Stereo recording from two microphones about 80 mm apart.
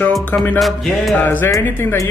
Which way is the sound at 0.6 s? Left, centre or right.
Centre.